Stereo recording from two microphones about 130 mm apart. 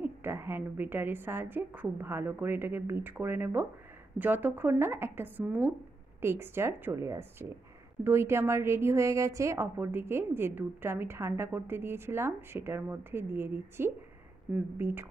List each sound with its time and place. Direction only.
0.0 s a woman's voice: 15° right (ahead or behind)